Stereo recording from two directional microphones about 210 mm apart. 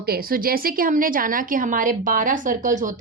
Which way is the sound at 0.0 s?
45° right (ahead or behind).